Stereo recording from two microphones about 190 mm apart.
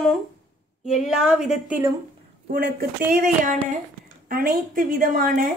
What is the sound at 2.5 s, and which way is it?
A woman's voice, 50° right (ahead or behind).